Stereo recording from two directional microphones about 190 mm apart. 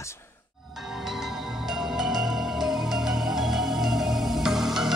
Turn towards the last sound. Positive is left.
turn(degrees=0)  # may be behind; listen again after turning